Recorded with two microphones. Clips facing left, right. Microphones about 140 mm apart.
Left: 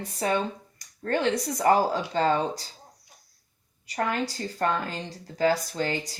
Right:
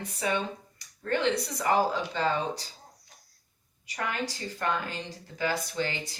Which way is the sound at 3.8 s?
40° left (ahead or behind).